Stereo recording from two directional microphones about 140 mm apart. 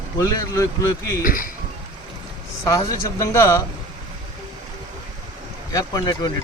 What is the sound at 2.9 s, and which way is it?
Speech, 20° left (ahead or behind).